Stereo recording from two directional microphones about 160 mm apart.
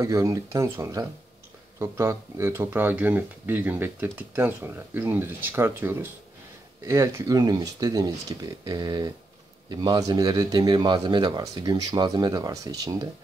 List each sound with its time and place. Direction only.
0.0 s speech: 20° right (ahead or behind)